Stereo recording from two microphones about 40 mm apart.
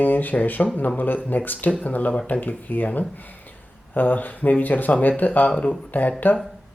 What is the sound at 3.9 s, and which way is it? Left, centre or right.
Speech, left.